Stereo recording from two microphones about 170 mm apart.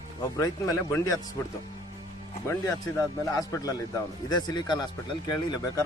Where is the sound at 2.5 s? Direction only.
20° left (ahead or behind).